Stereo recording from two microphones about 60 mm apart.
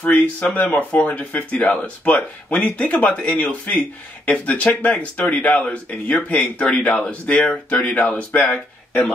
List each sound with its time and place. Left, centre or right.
0.0 s speech: left
8.3 s speech: left